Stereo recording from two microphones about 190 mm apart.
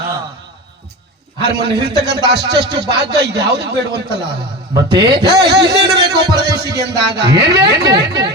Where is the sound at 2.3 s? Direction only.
60° right (ahead or behind).